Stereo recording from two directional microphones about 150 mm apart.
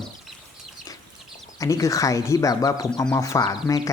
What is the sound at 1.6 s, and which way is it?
Speech, 20° left (ahead or behind).